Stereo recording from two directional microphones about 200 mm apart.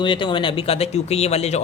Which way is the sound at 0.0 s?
25° left (ahead or behind).